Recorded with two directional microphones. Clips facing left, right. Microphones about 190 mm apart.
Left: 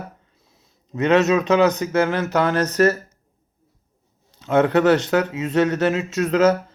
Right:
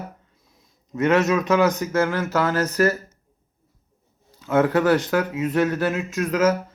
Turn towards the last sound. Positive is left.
turn(degrees=30)  # may be behind; listen again after turning